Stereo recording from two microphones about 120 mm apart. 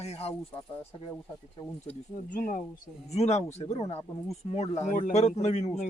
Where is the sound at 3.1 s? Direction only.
70° left (ahead or behind).